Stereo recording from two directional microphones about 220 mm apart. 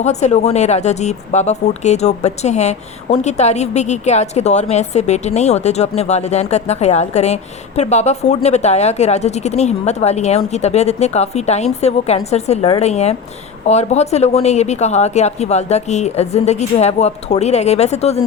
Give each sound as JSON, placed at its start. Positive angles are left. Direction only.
{"t": 0.0, "sound": "speech", "side_deg": 30}